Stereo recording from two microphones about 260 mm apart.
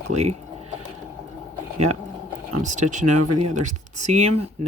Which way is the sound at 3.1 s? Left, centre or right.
Right.